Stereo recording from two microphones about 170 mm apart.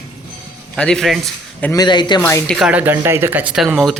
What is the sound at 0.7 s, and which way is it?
Speech, 5° left (ahead or behind).